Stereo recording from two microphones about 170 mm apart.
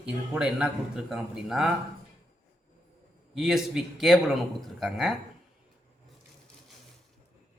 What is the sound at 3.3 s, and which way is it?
A man's voice, centre (ahead or behind).